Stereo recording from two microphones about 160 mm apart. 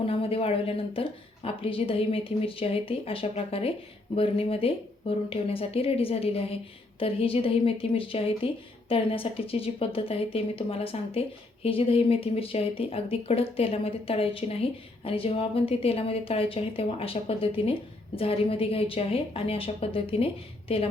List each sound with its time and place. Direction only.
0.0 s speech: 35° left (ahead or behind)